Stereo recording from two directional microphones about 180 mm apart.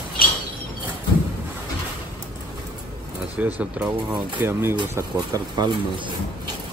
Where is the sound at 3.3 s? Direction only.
10° right (ahead or behind); by 6.1 s 25° right (ahead or behind).